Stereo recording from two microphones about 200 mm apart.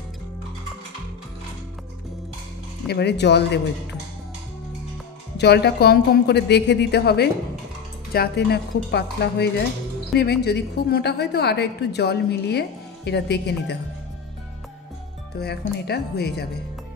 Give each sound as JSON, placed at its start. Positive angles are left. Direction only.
{"t": 2.9, "sound": "a woman's voice", "side_deg": 55}
{"t": 5.4, "sound": "a woman's voice", "side_deg": 55}
{"t": 15.3, "sound": "speech", "side_deg": 55}